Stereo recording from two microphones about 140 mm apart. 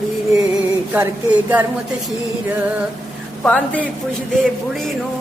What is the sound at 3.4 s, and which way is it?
Speech, 10° left (ahead or behind).